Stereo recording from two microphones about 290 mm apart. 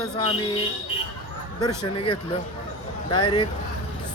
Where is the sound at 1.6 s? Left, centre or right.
Centre.